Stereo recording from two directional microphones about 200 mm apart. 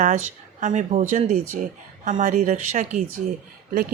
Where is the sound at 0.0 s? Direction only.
35° right (ahead or behind).